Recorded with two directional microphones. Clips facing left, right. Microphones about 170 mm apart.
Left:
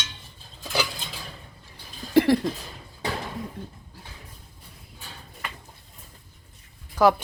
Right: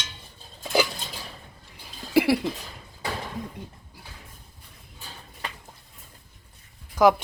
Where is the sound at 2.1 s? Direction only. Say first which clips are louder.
Left 2 dB; 10° right (ahead or behind).